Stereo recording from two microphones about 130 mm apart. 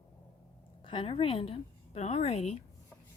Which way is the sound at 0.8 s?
40° left (ahead or behind).